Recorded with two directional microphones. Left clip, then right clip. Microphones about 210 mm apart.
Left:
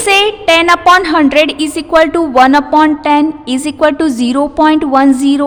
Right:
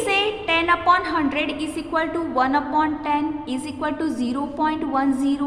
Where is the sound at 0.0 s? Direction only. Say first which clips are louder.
Left 12 dB; 55° left (ahead or behind).